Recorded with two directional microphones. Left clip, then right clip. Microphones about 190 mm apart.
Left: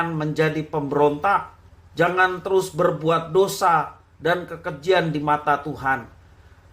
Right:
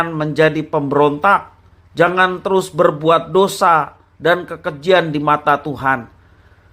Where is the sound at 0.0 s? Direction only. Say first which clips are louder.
Right 8 dB; 30° right (ahead or behind).